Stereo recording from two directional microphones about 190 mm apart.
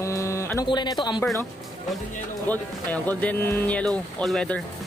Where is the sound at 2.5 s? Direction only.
10° left (ahead or behind).